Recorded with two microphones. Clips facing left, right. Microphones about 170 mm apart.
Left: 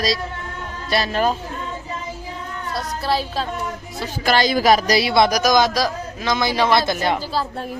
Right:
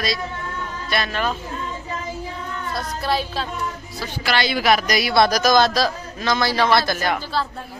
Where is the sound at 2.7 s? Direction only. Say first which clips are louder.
Left 1 dB; 35° left (ahead or behind).